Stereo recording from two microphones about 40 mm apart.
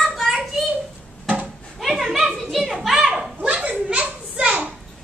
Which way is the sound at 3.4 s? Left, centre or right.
Right.